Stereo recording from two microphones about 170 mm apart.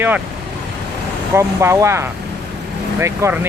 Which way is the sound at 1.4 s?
15° right (ahead or behind).